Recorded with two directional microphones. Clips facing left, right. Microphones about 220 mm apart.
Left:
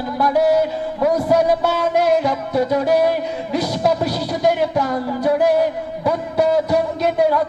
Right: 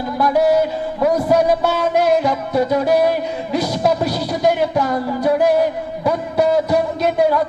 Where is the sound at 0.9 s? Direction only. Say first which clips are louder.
Right 1 dB; 30° right (ahead or behind).